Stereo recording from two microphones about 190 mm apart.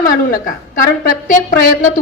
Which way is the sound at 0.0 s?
45° left (ahead or behind).